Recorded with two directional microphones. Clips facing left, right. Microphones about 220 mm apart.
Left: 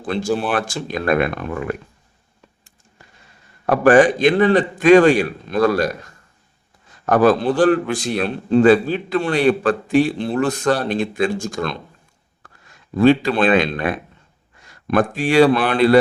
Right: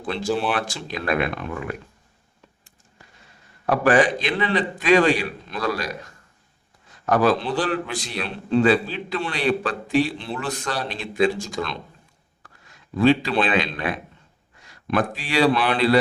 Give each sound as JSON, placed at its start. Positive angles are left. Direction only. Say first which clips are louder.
{"t": 0.0, "sound": "a man's voice", "louder": "left 3 dB", "side_deg": 45}
{"t": 3.7, "sound": "a man's voice", "louder": "left 6 dB", "side_deg": 45}
{"t": 7.0, "sound": "a man's voice", "louder": "left 5 dB", "side_deg": 50}
{"t": 13.0, "sound": "a man's voice", "louder": "left 4 dB", "side_deg": 50}